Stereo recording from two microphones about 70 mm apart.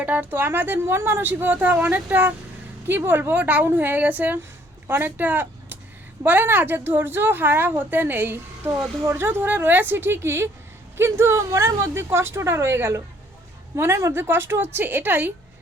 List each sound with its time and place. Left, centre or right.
0.0 s a woman's voice: right